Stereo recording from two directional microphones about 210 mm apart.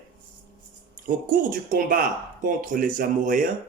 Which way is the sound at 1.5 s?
40° right (ahead or behind).